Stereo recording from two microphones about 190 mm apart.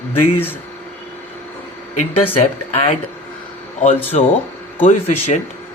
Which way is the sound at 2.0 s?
30° left (ahead or behind).